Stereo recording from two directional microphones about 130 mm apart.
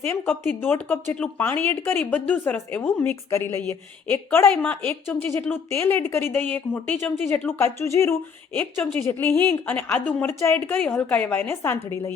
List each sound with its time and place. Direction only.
0.1 s a woman's voice: 15° left (ahead or behind)